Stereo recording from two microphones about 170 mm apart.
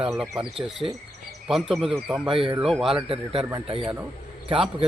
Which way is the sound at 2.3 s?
30° right (ahead or behind).